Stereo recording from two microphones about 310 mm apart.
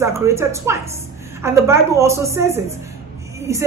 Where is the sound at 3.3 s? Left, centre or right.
Centre.